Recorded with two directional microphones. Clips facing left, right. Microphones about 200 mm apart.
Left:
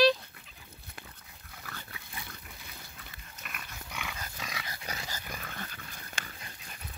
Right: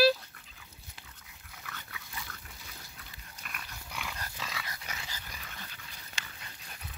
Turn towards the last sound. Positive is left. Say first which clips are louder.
# left 4 dB
turn(degrees=50)  # may be behind; listen again after turning